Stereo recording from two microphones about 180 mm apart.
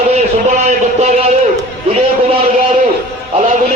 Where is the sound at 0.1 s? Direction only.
40° right (ahead or behind).